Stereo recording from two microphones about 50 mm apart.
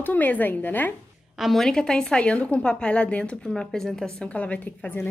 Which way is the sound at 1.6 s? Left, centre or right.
Centre.